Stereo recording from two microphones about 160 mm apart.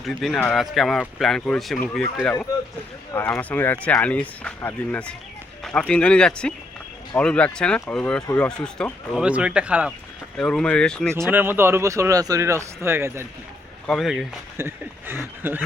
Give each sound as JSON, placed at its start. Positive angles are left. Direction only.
{"t": 0.0, "sound": "speech", "side_deg": 0}
{"t": 9.2, "sound": "speech", "side_deg": -5}
{"t": 10.3, "sound": "speech", "side_deg": 5}
{"t": 11.1, "sound": "speech", "side_deg": -15}
{"t": 13.8, "sound": "speech", "side_deg": 0}
{"t": 14.5, "sound": "speech", "side_deg": -15}